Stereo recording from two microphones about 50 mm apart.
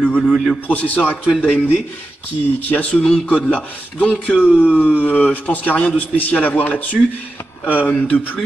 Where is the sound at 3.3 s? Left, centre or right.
Left.